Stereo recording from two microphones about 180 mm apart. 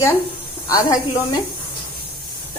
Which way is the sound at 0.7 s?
25° left (ahead or behind).